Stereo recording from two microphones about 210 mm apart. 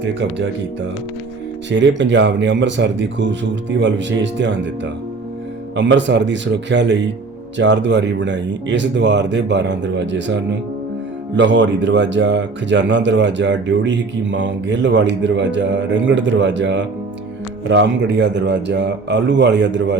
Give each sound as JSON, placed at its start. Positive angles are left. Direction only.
{"t": 0.0, "sound": "speech", "side_deg": -60}
{"t": 1.7, "sound": "speech", "side_deg": -60}